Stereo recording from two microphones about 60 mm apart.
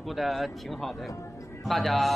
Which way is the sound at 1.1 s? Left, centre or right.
Left.